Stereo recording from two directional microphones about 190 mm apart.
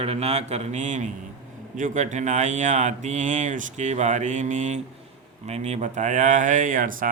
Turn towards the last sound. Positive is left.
turn(degrees=-45)  # may be behind; listen again after turning